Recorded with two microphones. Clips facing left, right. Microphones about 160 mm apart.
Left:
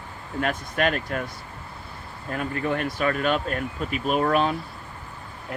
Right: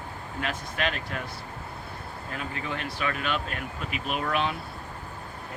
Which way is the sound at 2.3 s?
50° left (ahead or behind).